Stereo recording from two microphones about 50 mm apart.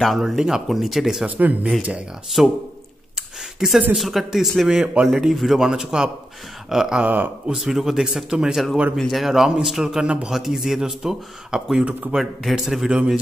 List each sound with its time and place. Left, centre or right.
0.0 s speech: centre
1.2 s speech: right
2.4 s speech: centre
3.5 s speech: centre
5.7 s a man's voice: centre
8.9 s a man's voice: centre